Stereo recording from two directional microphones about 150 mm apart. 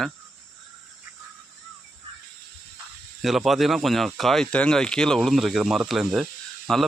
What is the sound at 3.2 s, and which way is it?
A man's voice, 5° right (ahead or behind).